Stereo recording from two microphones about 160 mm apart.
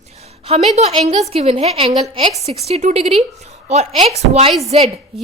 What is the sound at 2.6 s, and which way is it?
A woman's voice, 45° right (ahead or behind).